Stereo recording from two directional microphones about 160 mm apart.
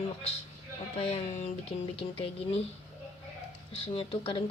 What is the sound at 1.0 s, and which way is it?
A woman's voice, 40° left (ahead or behind).